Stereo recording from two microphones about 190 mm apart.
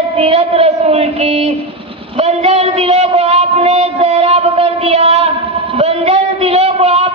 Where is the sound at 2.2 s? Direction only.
35° right (ahead or behind).